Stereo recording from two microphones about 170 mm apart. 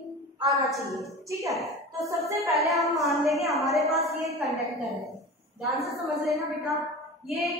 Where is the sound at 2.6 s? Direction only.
Centre (ahead or behind).